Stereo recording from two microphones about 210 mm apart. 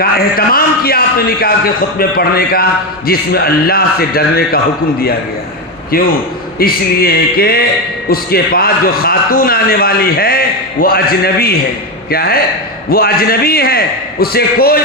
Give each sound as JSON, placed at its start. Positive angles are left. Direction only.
{"t": 0.0, "sound": "a man's voice", "side_deg": 45}
{"t": 6.6, "sound": "a man's voice", "side_deg": 45}